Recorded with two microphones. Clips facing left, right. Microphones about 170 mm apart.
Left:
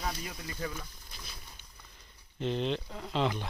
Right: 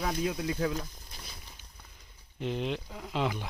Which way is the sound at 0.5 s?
65° right (ahead or behind).